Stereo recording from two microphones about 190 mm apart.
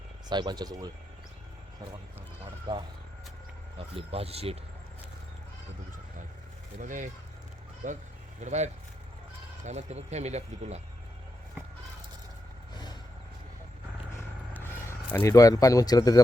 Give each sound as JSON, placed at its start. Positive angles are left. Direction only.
{"t": 0.3, "sound": "speech", "side_deg": -20}
{"t": 2.7, "sound": "speech", "side_deg": -25}
{"t": 6.7, "sound": "speech", "side_deg": -45}
{"t": 14.6, "sound": "speech", "side_deg": 10}